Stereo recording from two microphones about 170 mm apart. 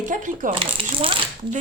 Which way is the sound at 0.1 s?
50° right (ahead or behind).